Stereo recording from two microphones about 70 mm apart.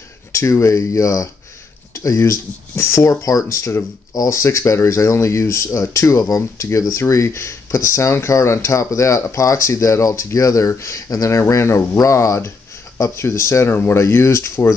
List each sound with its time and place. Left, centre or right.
0.3 s speech: left